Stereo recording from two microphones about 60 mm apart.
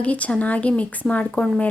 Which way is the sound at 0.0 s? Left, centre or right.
Left.